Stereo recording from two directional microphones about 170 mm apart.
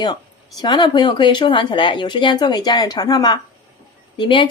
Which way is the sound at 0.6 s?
25° left (ahead or behind).